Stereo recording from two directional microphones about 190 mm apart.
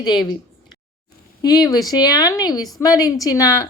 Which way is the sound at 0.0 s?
20° left (ahead or behind).